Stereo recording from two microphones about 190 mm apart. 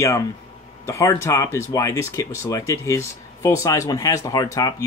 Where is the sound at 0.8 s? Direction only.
15° left (ahead or behind).